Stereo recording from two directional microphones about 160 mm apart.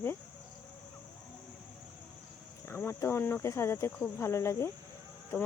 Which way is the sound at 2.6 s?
15° left (ahead or behind).